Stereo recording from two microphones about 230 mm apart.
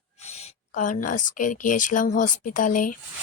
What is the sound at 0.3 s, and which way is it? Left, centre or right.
Speech, left.